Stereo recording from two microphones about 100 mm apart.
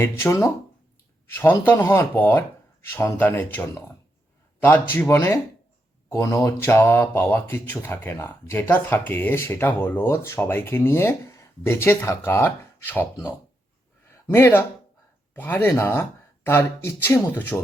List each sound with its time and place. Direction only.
0.0 s speech: 25° left (ahead or behind)
1.6 s speech: 20° left (ahead or behind)
14.3 s speech: 25° left (ahead or behind)